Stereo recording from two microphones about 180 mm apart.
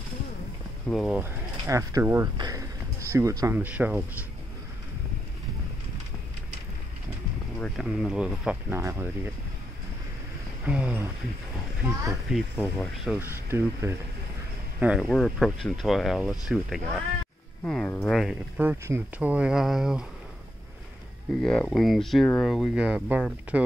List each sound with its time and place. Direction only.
0.8 s speech: centre (ahead or behind)
1.2 s speech: 15° right (ahead or behind)
7.5 s speech: centre (ahead or behind)
10.6 s speech: 10° right (ahead or behind)
12.9 s speech: centre (ahead or behind)
13.2 s speech: 15° right (ahead or behind)
21.4 s speech: 5° left (ahead or behind)